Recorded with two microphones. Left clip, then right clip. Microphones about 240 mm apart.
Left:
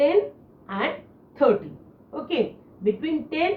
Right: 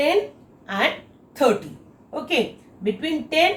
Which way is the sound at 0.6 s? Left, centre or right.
Right.